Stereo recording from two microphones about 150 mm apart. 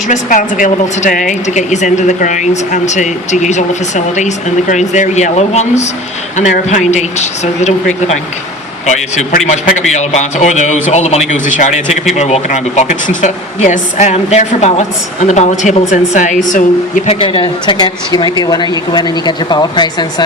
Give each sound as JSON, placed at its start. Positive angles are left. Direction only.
{"t": 0.1, "sound": "a woman's voice", "side_deg": 60}
{"t": 17.1, "sound": "a woman's voice", "side_deg": 35}